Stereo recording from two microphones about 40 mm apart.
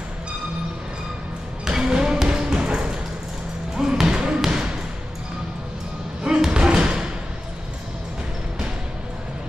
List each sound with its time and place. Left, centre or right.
1.6 s music: centre
3.7 s basketball bounce: centre
6.2 s thump: right